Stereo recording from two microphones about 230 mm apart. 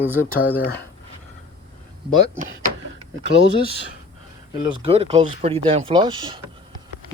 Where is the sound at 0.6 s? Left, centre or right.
Left.